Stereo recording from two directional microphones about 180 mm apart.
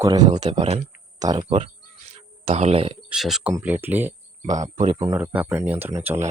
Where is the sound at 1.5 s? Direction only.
30° right (ahead or behind).